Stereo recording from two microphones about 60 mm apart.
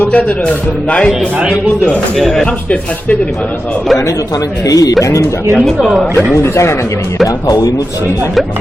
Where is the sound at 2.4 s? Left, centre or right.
Left.